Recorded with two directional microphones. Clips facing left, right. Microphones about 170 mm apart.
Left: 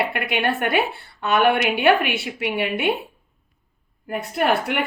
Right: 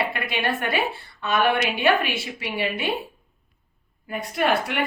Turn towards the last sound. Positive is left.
turn(degrees=60)  # may be behind; listen again after turning